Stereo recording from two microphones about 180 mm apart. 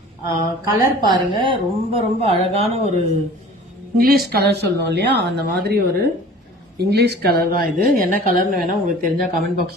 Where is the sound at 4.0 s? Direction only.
55° right (ahead or behind).